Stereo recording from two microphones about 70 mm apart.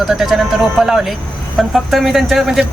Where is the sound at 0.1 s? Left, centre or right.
Centre.